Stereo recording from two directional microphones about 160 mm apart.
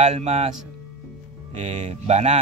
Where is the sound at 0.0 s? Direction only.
40° right (ahead or behind).